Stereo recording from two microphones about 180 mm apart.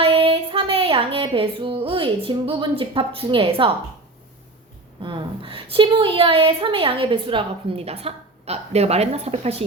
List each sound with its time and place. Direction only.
0.0 s music: 30° right (ahead or behind)
5.0 s a woman's voice: 30° right (ahead or behind)